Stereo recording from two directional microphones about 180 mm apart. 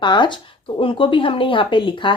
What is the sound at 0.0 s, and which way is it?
A woman's voice, 25° left (ahead or behind).